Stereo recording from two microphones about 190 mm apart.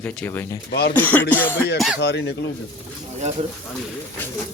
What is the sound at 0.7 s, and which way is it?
Speech, 60° left (ahead or behind).